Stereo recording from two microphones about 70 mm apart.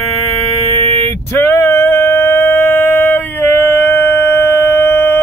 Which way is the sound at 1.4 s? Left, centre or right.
Left.